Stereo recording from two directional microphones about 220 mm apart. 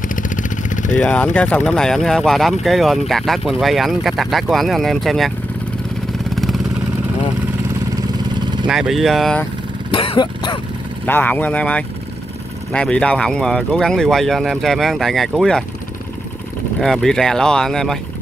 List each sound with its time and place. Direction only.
0.1 s vehicle: 35° left (ahead or behind)
0.9 s speech: 5° left (ahead or behind)
6.3 s vehicle: centre (ahead or behind)
7.9 s vehicle: 20° right (ahead or behind)
8.6 s speech: centre (ahead or behind)
9.8 s a sound: 25° left (ahead or behind)
11.1 s speech: 10° left (ahead or behind)
16.8 s speech: centre (ahead or behind)